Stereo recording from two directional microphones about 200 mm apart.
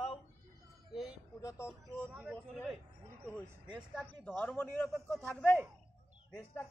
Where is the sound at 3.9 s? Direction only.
10° left (ahead or behind).